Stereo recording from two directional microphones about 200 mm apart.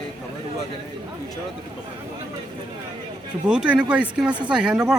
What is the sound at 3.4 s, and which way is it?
Speech, 5° right (ahead or behind).